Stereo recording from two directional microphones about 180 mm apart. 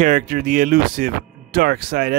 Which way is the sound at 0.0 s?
45° right (ahead or behind).